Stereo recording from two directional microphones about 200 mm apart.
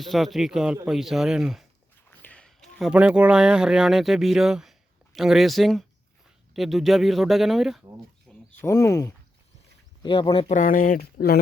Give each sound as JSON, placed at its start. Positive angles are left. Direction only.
{"t": 0.0, "sound": "speech", "side_deg": 0}
{"t": 2.0, "sound": "speech", "side_deg": 5}
{"t": 8.3, "sound": "a sound", "side_deg": 0}
{"t": 8.6, "sound": "speech", "side_deg": 15}
{"t": 10.0, "sound": "speech", "side_deg": 25}
{"t": 10.6, "sound": "speech", "side_deg": 45}